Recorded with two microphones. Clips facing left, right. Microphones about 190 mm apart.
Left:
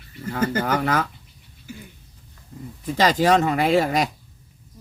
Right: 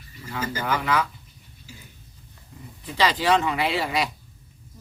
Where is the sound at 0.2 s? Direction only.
50° left (ahead or behind).